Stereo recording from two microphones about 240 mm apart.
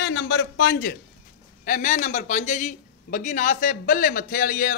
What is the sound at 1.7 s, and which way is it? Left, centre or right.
A man's voice, left.